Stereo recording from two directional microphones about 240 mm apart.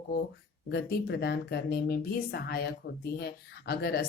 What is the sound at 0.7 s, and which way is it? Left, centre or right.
A woman's voice, left.